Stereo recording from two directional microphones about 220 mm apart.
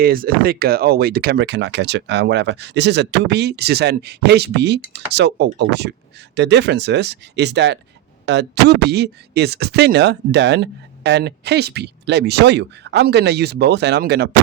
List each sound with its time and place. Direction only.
0.0 s speech: 40° right (ahead or behind)